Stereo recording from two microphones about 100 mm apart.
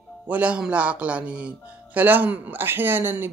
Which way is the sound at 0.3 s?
10° right (ahead or behind).